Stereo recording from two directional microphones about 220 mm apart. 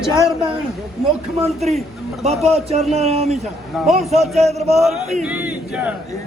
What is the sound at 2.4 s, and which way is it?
Chant, 30° right (ahead or behind).